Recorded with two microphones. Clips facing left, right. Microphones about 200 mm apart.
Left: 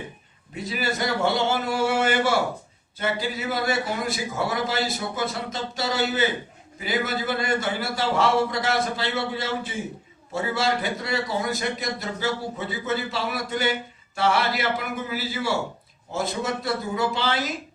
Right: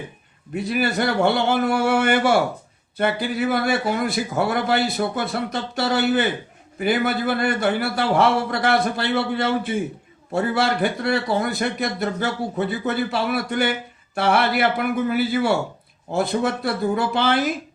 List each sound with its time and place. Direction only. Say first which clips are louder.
0.5 s a man's voice: right 6 dB; 60° right (ahead or behind)